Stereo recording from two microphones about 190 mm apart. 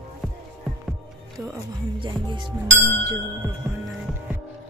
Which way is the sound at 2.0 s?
25° right (ahead or behind).